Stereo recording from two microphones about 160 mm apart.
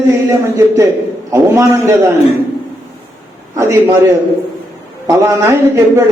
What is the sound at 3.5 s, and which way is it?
A man's voice, 20° right (ahead or behind).